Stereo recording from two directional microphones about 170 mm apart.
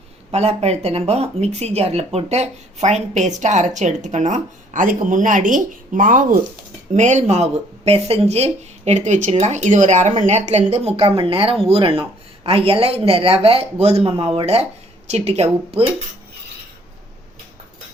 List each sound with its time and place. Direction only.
0.3 s speech: 40° right (ahead or behind)